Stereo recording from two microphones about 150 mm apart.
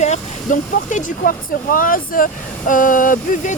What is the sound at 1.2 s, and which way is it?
Speech, 70° left (ahead or behind).